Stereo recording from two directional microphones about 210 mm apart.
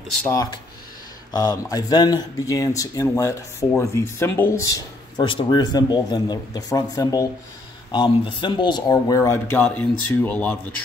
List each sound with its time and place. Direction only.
0.2 s speech: 10° left (ahead or behind)